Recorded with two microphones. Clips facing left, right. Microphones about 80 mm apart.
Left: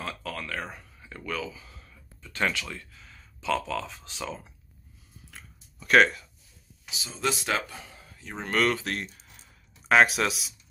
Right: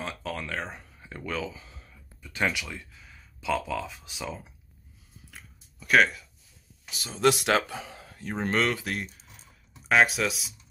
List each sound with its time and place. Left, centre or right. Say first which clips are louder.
0.0 s a sound: right 1 dB; right
2.2 s speech: even; centre
5.8 s speech: left 2 dB; centre
6.9 s speech: right 6 dB; right
8.2 s speech: right 6 dB; right
8.5 s speech: left 2 dB; right
9.8 s speech: left 2 dB; centre